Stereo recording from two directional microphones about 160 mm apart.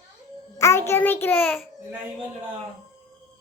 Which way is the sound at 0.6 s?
15° left (ahead or behind).